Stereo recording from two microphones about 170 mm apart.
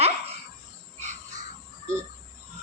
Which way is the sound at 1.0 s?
45° right (ahead or behind).